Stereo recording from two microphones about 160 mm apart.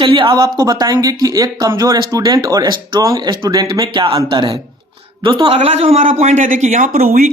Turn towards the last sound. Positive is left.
turn(degrees=-50)  # may be behind; listen again after turning